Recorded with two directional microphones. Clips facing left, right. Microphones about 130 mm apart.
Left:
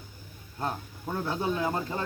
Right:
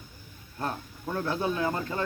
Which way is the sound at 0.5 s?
15° left (ahead or behind).